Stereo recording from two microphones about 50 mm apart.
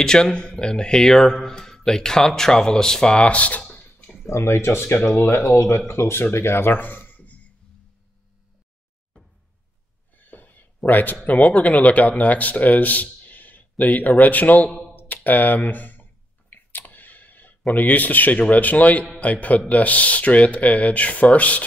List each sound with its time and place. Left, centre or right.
0.0 s speech: centre
4.3 s speech: left
4.9 s speech: left
5.2 s speech: left
5.9 s speech: left
10.1 s a sound: left
10.9 s a man's voice: left
15.0 s clicking: left
17.7 s a man's voice: left